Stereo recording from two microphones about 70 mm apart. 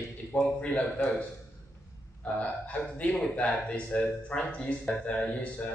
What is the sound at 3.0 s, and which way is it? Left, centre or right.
Speech, centre.